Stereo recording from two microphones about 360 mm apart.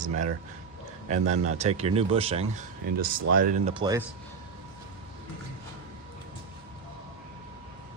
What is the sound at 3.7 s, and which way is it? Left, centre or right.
Speech, centre.